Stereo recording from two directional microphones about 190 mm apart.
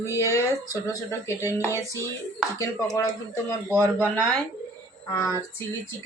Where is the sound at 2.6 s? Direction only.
20° left (ahead or behind).